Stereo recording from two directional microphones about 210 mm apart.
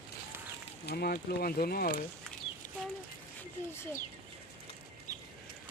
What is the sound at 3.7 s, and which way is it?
Speech, 10° left (ahead or behind).